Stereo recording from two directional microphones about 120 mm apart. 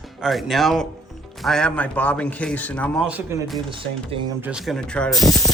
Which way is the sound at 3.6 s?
45° right (ahead or behind).